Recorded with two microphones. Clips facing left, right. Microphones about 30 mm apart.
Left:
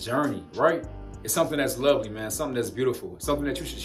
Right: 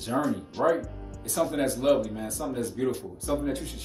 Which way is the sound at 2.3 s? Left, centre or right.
Left.